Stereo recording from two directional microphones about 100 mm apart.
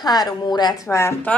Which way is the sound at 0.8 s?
25° left (ahead or behind).